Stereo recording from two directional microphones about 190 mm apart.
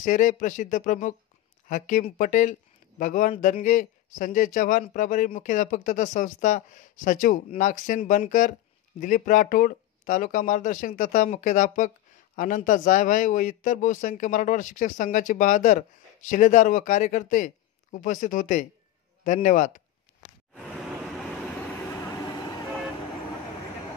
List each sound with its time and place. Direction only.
0.0 s a man's voice: 40° left (ahead or behind)
20.5 s waves: centre (ahead or behind)
21.9 s train: 15° left (ahead or behind)